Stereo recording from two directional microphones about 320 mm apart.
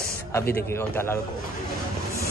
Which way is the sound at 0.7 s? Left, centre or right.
Centre.